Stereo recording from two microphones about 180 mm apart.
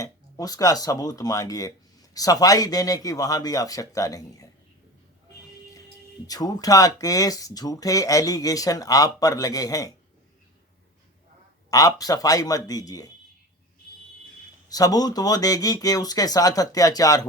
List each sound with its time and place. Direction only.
0.0 s speech: 20° left (ahead or behind)
6.2 s speech: 20° left (ahead or behind)
11.7 s speech: 20° left (ahead or behind)
14.7 s speech: 20° left (ahead or behind)